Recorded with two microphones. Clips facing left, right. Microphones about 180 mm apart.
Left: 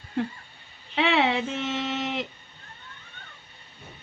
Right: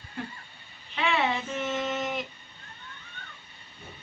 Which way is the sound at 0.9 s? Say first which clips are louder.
Left 4 dB; 75° left (ahead or behind).